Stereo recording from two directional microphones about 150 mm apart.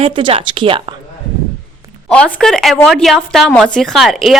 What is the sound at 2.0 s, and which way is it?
A woman's voice, 5° left (ahead or behind).